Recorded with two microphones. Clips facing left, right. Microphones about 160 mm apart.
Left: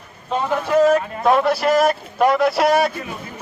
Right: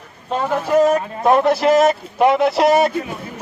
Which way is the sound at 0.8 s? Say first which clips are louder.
Left 1 dB; 20° right (ahead or behind).